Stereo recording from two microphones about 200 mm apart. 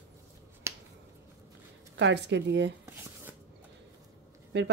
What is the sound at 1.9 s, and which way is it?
Speech, 60° right (ahead or behind).